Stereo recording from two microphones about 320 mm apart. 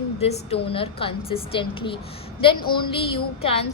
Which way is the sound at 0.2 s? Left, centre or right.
Centre.